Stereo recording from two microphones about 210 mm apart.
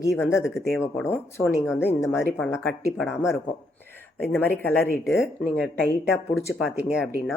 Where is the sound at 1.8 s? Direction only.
10° left (ahead or behind).